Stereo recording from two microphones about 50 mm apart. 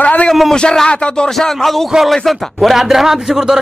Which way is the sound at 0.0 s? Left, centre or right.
Left.